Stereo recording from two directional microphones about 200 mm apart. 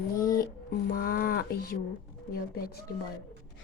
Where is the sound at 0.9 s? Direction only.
45° left (ahead or behind).